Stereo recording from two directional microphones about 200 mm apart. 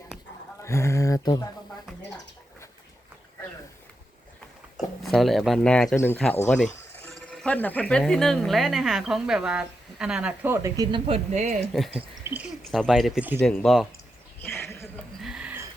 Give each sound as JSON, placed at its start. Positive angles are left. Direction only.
{"t": 0.6, "sound": "speech", "side_deg": 15}
{"t": 5.0, "sound": "speech", "side_deg": 0}
{"t": 11.0, "sound": "speech", "side_deg": -35}
{"t": 11.9, "sound": "speech", "side_deg": -5}
{"t": 14.4, "sound": "a sound", "side_deg": 10}
{"t": 15.2, "sound": "a sound", "side_deg": -5}